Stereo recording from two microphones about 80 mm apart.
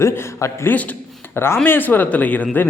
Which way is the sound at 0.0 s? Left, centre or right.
Left.